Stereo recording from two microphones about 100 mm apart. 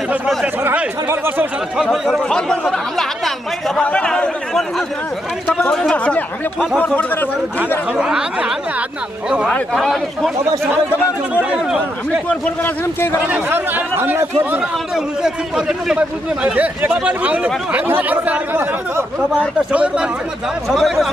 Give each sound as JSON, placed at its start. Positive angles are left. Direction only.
{"t": 1.0, "sound": "speech", "side_deg": -25}
{"t": 1.8, "sound": "speech", "side_deg": 0}
{"t": 7.9, "sound": "a man's voice", "side_deg": -5}
{"t": 9.8, "sound": "a man's voice", "side_deg": 0}
{"t": 10.4, "sound": "speech", "side_deg": -30}
{"t": 12.3, "sound": "a man's voice", "side_deg": 20}
{"t": 13.3, "sound": "speech", "side_deg": -20}
{"t": 15.2, "sound": "a man's voice", "side_deg": -5}
{"t": 20.7, "sound": "a man's voice", "side_deg": 0}